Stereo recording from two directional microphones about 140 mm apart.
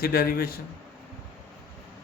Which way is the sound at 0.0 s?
90° left.